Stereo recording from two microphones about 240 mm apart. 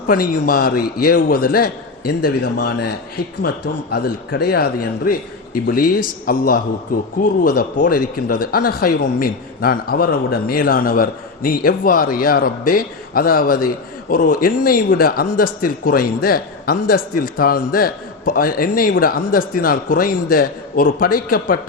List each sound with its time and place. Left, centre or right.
0.1 s speech: left
6.2 s speech: left